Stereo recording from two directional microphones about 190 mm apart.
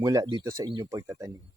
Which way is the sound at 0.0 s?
20° right (ahead or behind).